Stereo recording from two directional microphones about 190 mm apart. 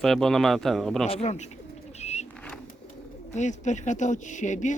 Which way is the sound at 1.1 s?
35° left (ahead or behind).